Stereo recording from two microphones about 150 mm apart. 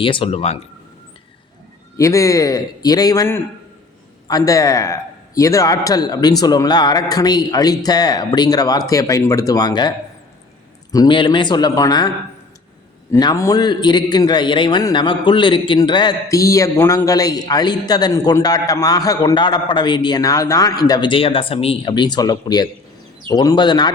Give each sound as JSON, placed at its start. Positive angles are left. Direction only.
{"t": 0.0, "sound": "speech", "side_deg": 35}
{"t": 2.0, "sound": "a man's voice", "side_deg": 20}
{"t": 10.9, "sound": "a man's voice", "side_deg": 30}